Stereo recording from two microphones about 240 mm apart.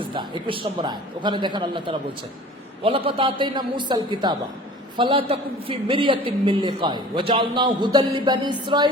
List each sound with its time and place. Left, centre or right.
0.0 s a woman's voice: centre
8.6 s music: centre